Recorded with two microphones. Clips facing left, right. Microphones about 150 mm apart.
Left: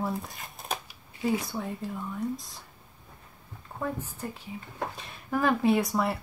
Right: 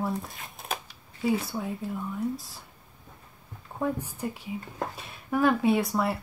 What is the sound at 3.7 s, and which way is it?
Speech, 10° right (ahead or behind).